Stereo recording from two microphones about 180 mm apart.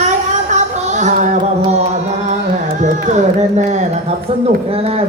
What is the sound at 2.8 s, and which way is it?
A woman's voice, 40° right (ahead or behind).